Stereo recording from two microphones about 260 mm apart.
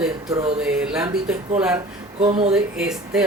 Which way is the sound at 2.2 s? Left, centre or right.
Right.